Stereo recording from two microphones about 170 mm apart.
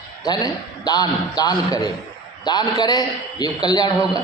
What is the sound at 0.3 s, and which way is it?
A man's voice, 25° left (ahead or behind).